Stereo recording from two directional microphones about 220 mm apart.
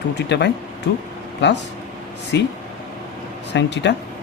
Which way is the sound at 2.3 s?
50° left (ahead or behind).